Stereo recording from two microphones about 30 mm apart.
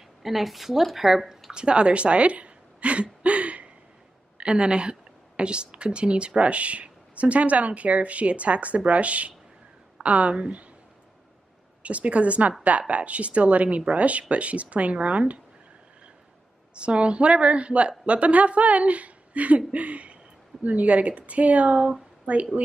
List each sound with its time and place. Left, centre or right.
0.2 s speech: centre
1.5 s a sound: right
4.4 s a woman's voice: right
11.8 s a woman's voice: right
16.7 s a woman's voice: right